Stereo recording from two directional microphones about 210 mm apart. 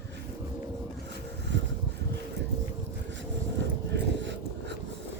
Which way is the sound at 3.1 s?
55° right (ahead or behind).